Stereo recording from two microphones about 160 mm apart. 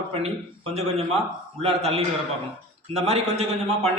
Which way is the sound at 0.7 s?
40° right (ahead or behind).